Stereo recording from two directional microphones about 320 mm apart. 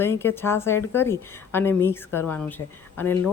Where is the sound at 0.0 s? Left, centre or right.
Centre.